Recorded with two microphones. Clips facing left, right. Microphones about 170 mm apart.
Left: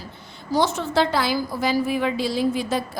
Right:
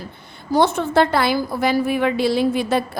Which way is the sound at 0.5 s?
55° right (ahead or behind).